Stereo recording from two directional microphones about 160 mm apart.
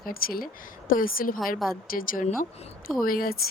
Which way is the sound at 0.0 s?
65° left (ahead or behind).